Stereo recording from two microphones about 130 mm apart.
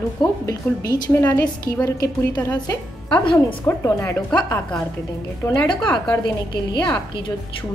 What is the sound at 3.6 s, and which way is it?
Speech, 20° left (ahead or behind).